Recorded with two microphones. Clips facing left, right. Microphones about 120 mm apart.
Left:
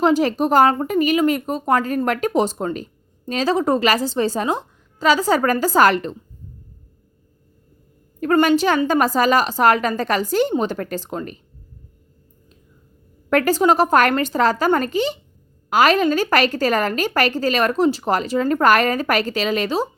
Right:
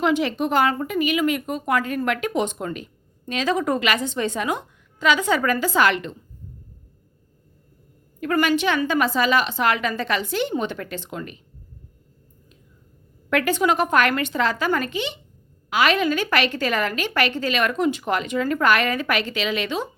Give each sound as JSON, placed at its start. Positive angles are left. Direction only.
{"t": 0.0, "sound": "a woman's voice", "side_deg": 40}
{"t": 8.2, "sound": "a woman's voice", "side_deg": 35}
{"t": 13.3, "sound": "a woman's voice", "side_deg": 40}